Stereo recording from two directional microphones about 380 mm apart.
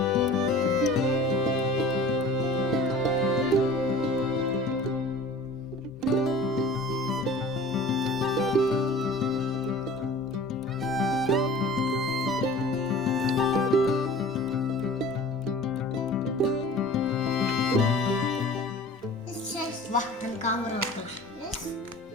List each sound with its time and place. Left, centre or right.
0.0 s music: centre
6.0 s music: centre
10.8 s music: centre
19.9 s music: centre